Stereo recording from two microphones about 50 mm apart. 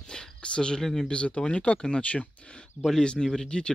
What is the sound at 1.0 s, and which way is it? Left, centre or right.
Speech, left.